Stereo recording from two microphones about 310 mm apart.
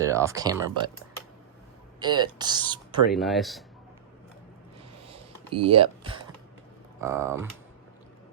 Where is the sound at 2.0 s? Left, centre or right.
Centre.